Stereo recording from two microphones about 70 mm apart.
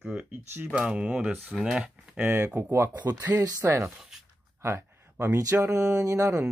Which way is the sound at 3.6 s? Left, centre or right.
Right.